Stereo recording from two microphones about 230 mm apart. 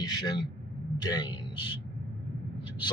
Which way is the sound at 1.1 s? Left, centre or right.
Centre.